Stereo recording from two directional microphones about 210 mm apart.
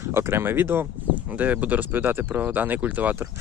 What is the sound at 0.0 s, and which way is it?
Speech, 10° right (ahead or behind).